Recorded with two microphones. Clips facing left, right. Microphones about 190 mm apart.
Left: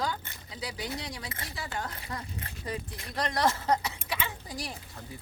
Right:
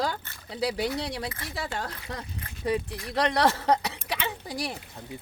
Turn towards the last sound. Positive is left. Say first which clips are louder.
# right 6 dB
turn(degrees=-70)  # may be behind; listen again after turning